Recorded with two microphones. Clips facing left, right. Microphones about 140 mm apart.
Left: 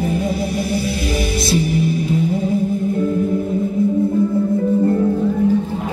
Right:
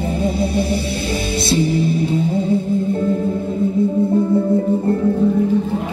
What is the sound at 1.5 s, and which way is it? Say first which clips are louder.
Music: right 2 dB; 30° right (ahead or behind).